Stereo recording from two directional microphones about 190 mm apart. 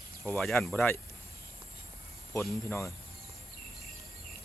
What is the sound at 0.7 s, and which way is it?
Speech, 10° left (ahead or behind).